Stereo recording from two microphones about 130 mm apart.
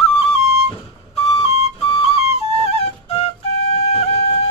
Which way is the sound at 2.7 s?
55° left (ahead or behind).